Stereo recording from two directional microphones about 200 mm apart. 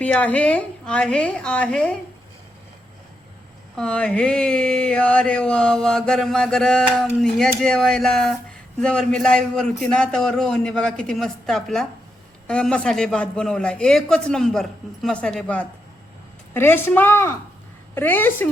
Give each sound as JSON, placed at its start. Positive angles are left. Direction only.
{"t": 0.0, "sound": "speech", "side_deg": 5}
{"t": 3.8, "sound": "speech", "side_deg": 5}